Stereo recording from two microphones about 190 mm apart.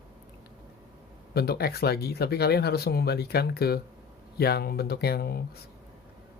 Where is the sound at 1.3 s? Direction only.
55° left (ahead or behind).